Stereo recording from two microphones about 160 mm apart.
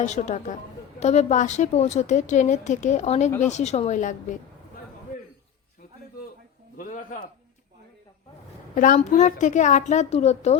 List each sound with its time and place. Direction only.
0.0 s a woman's voice: 45° left (ahead or behind)
6.7 s a sound: 55° left (ahead or behind)
8.7 s a woman's voice: 55° left (ahead or behind)